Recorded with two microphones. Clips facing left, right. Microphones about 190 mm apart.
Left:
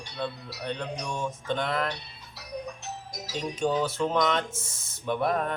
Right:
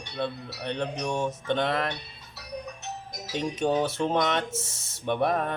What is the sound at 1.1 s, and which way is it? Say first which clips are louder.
Mantra: right 3 dB; 65° right (ahead or behind).